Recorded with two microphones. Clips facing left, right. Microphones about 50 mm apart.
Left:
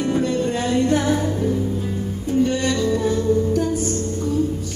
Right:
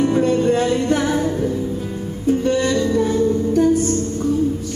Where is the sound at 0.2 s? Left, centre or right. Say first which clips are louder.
Right 5 dB; right.